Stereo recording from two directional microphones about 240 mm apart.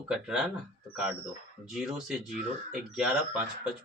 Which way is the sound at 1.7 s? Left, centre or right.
Centre.